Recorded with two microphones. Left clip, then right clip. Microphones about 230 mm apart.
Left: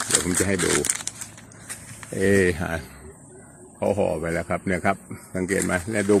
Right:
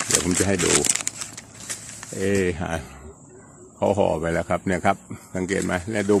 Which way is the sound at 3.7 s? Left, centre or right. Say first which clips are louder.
Right 2 dB; right.